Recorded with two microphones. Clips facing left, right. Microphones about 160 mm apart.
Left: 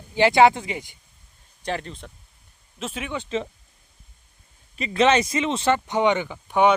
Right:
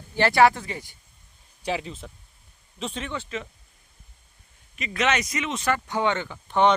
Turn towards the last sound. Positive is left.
turn(degrees=10)  # may be behind; listen again after turning